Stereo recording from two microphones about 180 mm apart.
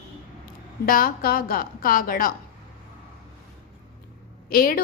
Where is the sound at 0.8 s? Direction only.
55° left (ahead or behind).